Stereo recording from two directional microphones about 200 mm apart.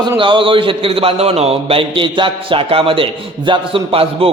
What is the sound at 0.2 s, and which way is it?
A man's voice, 25° right (ahead or behind).